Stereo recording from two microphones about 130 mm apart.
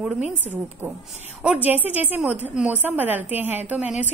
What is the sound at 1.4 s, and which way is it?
A woman's voice, 10° right (ahead or behind).